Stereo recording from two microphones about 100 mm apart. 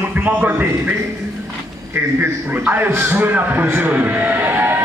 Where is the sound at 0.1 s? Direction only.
15° right (ahead or behind).